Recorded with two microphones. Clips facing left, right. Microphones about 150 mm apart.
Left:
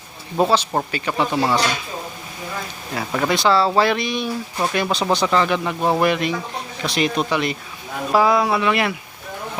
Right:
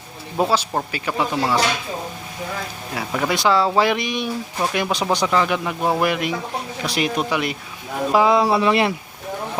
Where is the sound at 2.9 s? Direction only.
5° right (ahead or behind).